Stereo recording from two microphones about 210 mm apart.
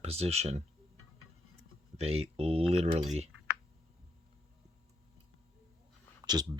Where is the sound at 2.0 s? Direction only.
30° right (ahead or behind).